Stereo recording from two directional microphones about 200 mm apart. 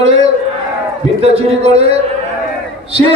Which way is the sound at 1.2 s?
30° right (ahead or behind).